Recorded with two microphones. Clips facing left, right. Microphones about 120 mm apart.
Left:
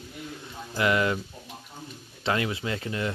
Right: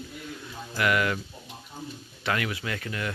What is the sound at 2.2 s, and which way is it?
Speech, 25° left (ahead or behind).